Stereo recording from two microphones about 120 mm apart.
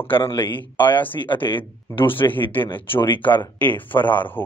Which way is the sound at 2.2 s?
30° left (ahead or behind).